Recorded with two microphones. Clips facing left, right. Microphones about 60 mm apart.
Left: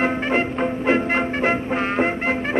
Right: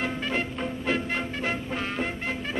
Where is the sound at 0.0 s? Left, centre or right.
Left.